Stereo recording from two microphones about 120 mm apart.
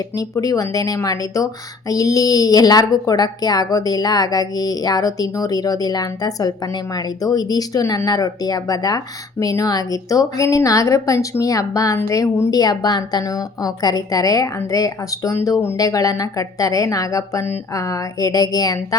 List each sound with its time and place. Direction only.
0.2 s a woman's voice: 30° left (ahead or behind)